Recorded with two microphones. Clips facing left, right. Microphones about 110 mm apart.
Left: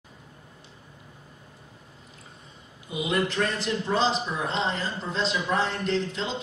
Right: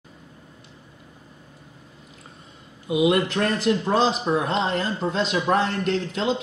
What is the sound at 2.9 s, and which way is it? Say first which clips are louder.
Speech: right 7 dB; 70° right (ahead or behind).